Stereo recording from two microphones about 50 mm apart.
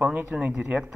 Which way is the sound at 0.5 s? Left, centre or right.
Right.